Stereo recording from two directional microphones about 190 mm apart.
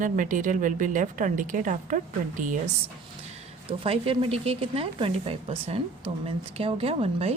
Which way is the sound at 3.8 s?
30° right (ahead or behind).